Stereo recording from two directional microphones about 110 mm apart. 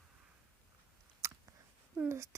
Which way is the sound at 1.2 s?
30° right (ahead or behind).